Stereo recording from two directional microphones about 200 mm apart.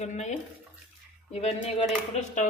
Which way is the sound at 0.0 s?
35° left (ahead or behind).